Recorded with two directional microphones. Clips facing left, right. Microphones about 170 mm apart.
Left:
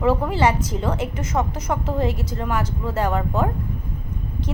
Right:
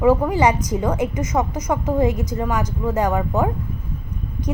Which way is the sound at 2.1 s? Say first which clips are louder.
Right 4 dB; 50° right (ahead or behind).